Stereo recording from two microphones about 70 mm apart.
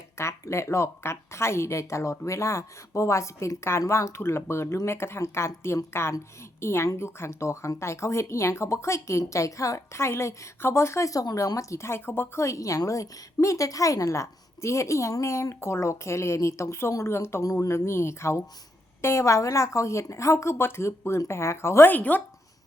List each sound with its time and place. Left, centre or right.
0.2 s speech: left
17.4 s speech: left
21.9 s speech: left